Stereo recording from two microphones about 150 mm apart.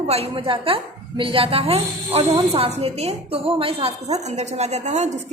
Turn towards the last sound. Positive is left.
turn(degrees=-50)  # may be behind; listen again after turning